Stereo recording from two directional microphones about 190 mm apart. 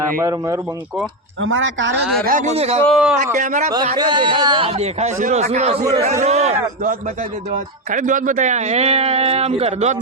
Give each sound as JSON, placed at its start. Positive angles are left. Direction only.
{"t": 0.2, "sound": "speech", "side_deg": -15}
{"t": 1.4, "sound": "speech", "side_deg": -90}
{"t": 2.2, "sound": "speech", "side_deg": -45}
{"t": 2.6, "sound": "speech", "side_deg": -35}
{"t": 2.8, "sound": "speech", "side_deg": 0}
{"t": 3.3, "sound": "speech", "side_deg": -40}
{"t": 3.9, "sound": "a man's voice", "side_deg": -25}
{"t": 7.9, "sound": "speech", "side_deg": -45}